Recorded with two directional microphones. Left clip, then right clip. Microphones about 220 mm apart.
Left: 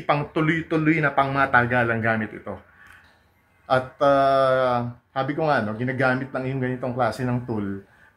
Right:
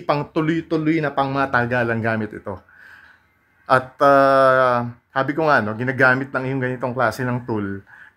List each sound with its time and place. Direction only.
0.0 s speech: 55° right (ahead or behind)
3.6 s speech: 45° right (ahead or behind)